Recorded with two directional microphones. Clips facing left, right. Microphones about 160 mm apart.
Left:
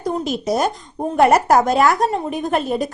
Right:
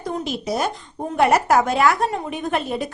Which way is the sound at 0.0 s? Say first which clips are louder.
Left 4 dB; 40° left (ahead or behind).